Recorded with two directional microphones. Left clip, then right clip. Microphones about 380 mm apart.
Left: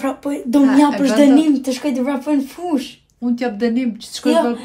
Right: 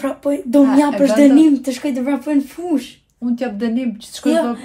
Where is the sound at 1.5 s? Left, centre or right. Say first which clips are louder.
Left 1 dB; centre.